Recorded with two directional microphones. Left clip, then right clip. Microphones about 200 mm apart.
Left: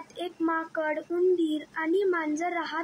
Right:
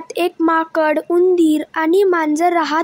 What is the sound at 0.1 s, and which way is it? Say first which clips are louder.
Speech: right 14 dB; 45° right (ahead or behind).